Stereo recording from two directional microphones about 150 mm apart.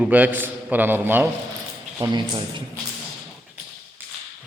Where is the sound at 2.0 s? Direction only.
30° right (ahead or behind).